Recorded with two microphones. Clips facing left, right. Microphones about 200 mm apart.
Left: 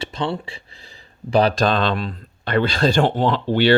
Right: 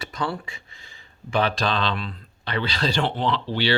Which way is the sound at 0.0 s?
25° left (ahead or behind).